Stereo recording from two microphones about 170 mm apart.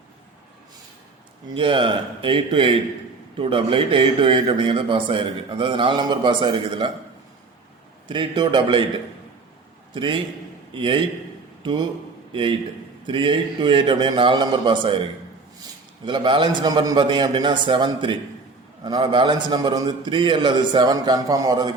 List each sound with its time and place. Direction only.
1.5 s a man's voice: 30° right (ahead or behind)
8.0 s a man's voice: 25° right (ahead or behind)
9.9 s a man's voice: 30° right (ahead or behind)
16.0 s a man's voice: 30° right (ahead or behind)